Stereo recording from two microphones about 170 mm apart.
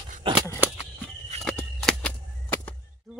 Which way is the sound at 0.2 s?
30° right (ahead or behind).